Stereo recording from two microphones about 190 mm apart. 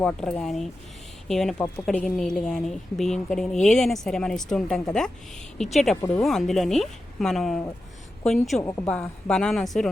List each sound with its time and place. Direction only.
0.0 s speech: 5° left (ahead or behind)
8.6 s a woman's voice: 15° left (ahead or behind)
8.9 s speech: 5° left (ahead or behind)